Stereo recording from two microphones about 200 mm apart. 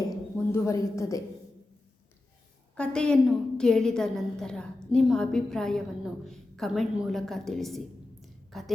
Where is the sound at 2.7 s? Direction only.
5° left (ahead or behind).